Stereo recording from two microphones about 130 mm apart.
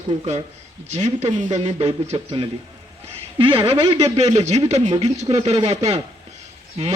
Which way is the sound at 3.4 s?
45° right (ahead or behind).